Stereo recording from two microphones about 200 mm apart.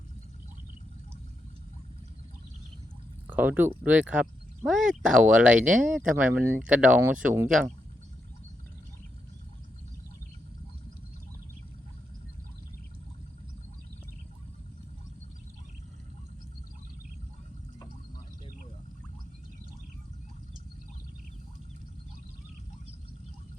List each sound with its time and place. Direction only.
3.2 s speech: 10° right (ahead or behind)